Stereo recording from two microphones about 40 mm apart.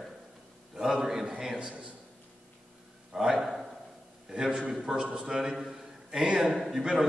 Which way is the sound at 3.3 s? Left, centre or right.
Centre.